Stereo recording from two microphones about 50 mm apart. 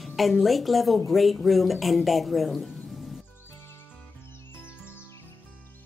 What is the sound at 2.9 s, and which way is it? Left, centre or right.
Music, centre.